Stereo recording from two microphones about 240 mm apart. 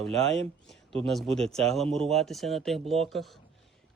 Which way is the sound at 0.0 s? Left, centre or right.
Centre.